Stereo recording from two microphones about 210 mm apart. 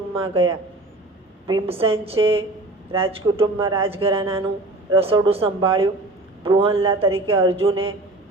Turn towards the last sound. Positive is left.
turn(degrees=-25)  # may be behind; listen again after turning